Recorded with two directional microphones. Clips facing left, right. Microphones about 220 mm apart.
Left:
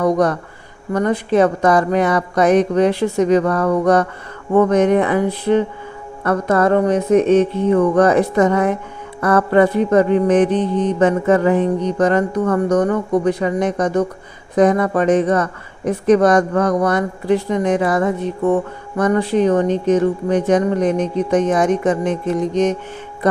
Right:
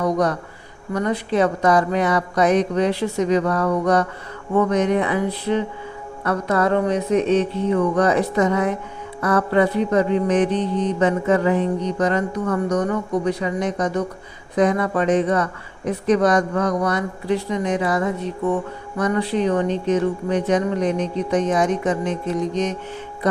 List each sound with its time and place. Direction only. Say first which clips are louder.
0.0 s mantra: left 4 dB; 50° left (ahead or behind)